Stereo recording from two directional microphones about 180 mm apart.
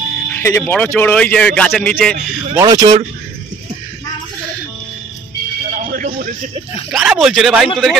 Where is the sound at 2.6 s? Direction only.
20° right (ahead or behind).